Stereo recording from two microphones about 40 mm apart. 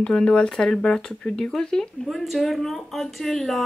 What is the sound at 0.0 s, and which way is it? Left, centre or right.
Speech, left.